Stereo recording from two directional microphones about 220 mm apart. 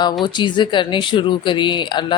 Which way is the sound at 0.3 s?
20° left (ahead or behind).